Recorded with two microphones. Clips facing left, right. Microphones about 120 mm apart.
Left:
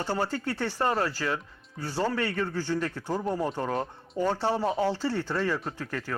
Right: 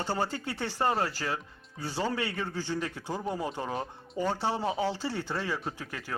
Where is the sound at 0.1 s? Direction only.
20° right (ahead or behind).